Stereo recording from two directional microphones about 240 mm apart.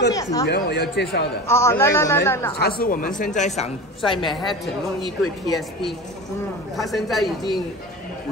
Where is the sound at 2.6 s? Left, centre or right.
Left.